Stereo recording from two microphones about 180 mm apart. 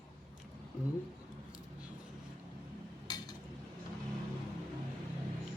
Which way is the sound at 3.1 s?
20° left (ahead or behind).